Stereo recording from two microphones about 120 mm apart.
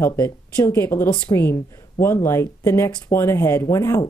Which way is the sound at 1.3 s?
40° left (ahead or behind).